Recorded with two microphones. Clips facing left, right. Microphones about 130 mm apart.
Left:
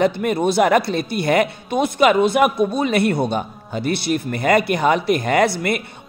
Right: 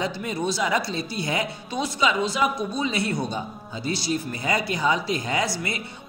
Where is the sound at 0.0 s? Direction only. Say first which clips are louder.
Left 9 dB; 60° left (ahead or behind).